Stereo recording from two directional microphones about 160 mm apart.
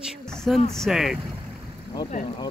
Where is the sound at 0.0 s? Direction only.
Centre (ahead or behind).